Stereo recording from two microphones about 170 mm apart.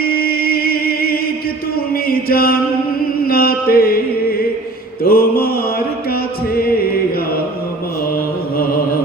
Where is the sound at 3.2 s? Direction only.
60° left (ahead or behind).